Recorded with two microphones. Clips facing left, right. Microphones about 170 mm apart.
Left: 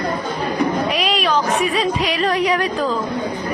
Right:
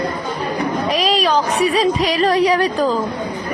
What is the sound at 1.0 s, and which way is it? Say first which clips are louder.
A woman's voice: right 2 dB; 35° right (ahead or behind).